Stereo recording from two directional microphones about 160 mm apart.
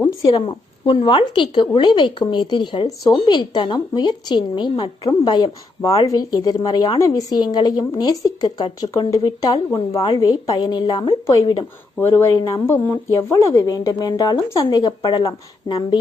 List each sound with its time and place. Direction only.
0.3 s a woman's voice: 35° left (ahead or behind)